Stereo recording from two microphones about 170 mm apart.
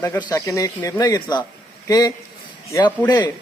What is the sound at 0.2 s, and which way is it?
Speech, 20° left (ahead or behind).